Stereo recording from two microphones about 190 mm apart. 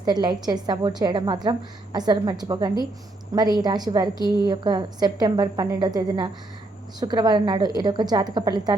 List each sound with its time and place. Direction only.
0.0 s a woman's voice: 20° right (ahead or behind)